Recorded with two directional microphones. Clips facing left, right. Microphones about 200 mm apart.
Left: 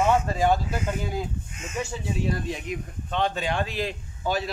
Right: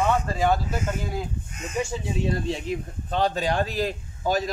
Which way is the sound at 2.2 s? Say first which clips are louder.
Right 4 dB; 25° right (ahead or behind).